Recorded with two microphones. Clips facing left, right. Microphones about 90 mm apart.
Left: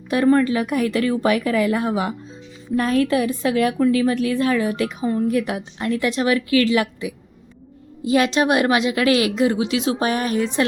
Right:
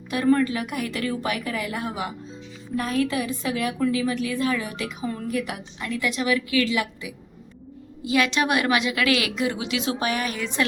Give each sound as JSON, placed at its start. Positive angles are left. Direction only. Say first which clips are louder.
{"t": 0.1, "sound": "a woman's voice", "louder": "left 4 dB", "side_deg": 45}
{"t": 1.5, "sound": "a woman's voice", "louder": "left 10 dB", "side_deg": 55}
{"t": 1.8, "sound": "a woman's voice", "louder": "left 7 dB", "side_deg": 40}
{"t": 6.2, "sound": "a woman's voice", "louder": "left 5 dB", "side_deg": 60}
{"t": 8.0, "sound": "a woman's voice", "louder": "left 5 dB", "side_deg": 35}